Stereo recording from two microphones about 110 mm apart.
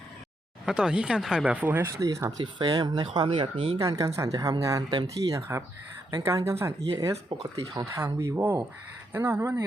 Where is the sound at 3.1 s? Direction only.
55° right (ahead or behind).